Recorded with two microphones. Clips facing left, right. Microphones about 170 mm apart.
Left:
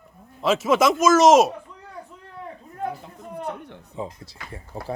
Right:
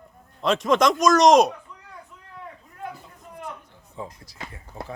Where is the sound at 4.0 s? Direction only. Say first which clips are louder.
Left 3 dB; 25° left (ahead or behind).